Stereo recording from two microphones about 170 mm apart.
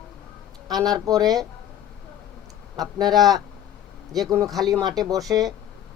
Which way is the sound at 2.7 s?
25° right (ahead or behind).